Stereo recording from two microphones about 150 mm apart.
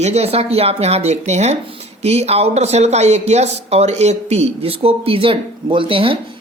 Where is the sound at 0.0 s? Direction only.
45° right (ahead or behind).